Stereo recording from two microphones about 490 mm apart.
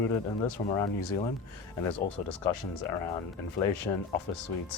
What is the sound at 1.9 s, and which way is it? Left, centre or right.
Speech, left.